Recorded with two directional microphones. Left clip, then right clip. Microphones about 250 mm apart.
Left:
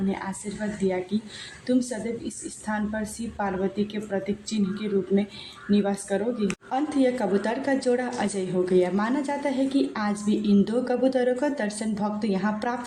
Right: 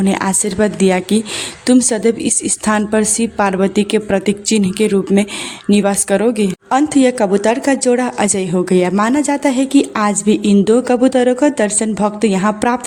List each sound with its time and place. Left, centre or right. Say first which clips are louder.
0.1 s a woman's voice: right 15 dB; right